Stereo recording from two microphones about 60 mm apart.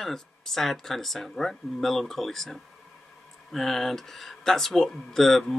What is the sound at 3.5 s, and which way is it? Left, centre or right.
Speech, centre.